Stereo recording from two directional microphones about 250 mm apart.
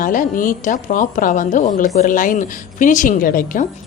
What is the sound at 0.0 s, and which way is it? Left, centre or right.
A woman's voice, left.